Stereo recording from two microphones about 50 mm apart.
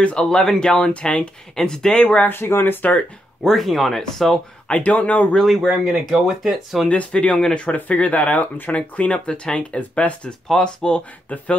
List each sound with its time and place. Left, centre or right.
0.2 s speech: centre
1.5 s speech: centre
2.2 s speech: left
3.4 s speech: centre
4.6 s speech: left
5.4 s speech: centre
6.9 s speech: left